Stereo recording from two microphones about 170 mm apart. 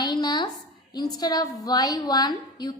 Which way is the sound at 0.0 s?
25° left (ahead or behind).